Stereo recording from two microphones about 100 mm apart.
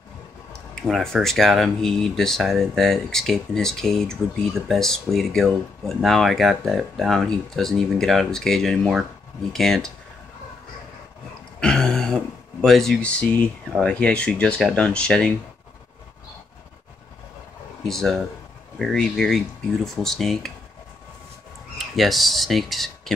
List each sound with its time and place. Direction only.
0.5 s speech: 5° left (ahead or behind)
11.6 s a sound: 5° left (ahead or behind)
12.6 s speech: centre (ahead or behind)
17.8 s speech: 5° left (ahead or behind)
21.7 s speech: centre (ahead or behind)